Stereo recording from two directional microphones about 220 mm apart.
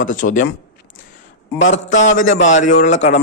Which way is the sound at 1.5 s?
35° left (ahead or behind).